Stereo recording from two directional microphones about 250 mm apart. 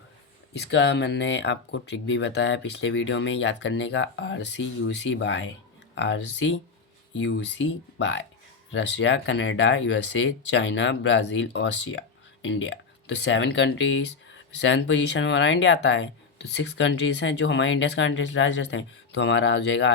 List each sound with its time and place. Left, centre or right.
0.5 s speech: left